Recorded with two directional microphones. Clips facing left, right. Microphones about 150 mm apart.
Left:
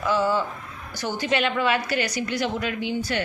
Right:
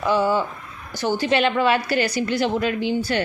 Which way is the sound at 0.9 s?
30° right (ahead or behind).